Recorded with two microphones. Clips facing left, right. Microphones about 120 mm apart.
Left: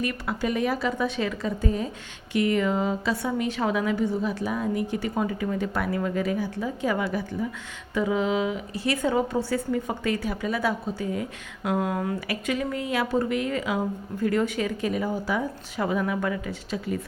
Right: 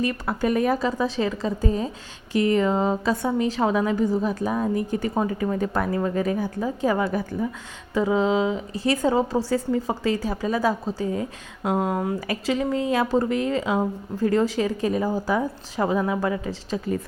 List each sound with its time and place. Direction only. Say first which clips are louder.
0.0 s a woman's voice: right 4 dB; 35° right (ahead or behind)
7.9 s a woman's voice: right 3 dB; 30° right (ahead or behind)